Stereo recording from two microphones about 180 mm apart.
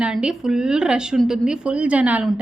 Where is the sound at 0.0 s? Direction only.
5° right (ahead or behind).